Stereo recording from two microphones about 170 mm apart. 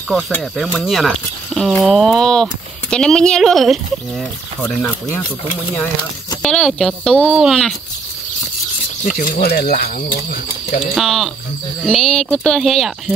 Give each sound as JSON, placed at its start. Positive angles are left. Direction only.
{"t": 0.3, "sound": "speech", "side_deg": 0}
{"t": 6.4, "sound": "speech", "side_deg": 5}
{"t": 9.0, "sound": "speech", "side_deg": 55}
{"t": 11.0, "sound": "speech", "side_deg": 0}